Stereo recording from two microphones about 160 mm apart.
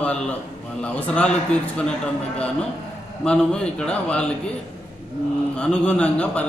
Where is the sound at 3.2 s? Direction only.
5° left (ahead or behind).